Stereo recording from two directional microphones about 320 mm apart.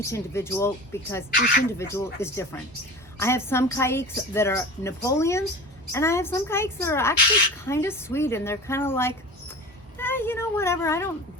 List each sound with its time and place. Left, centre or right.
0.1 s a woman's voice: centre
1.3 s speech: left
1.8 s a woman's voice: centre